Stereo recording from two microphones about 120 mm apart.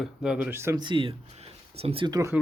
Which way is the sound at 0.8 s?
40° right (ahead or behind).